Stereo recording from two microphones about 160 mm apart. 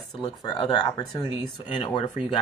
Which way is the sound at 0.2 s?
25° left (ahead or behind).